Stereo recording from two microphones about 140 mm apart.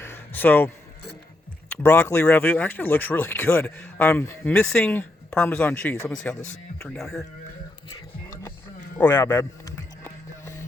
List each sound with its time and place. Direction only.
0.0 s a sound: 15° left (ahead or behind)
1.7 s speech: 15° left (ahead or behind)
4.5 s speech: 5° left (ahead or behind)
9.0 s speech: 10° left (ahead or behind)
9.4 s music: 25° left (ahead or behind)